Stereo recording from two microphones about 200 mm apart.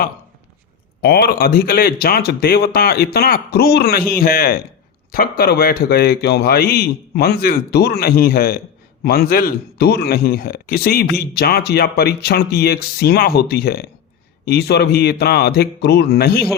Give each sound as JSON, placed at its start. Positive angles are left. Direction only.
{"t": 1.0, "sound": "a man's voice", "side_deg": 50}